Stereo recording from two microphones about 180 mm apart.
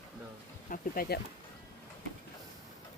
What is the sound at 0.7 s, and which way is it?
Speech, 55° left (ahead or behind).